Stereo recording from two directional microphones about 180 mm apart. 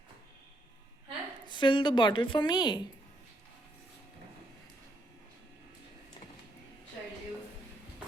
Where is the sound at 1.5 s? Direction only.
25° left (ahead or behind).